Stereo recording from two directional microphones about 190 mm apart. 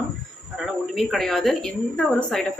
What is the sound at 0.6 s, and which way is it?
A woman's voice, centre (ahead or behind).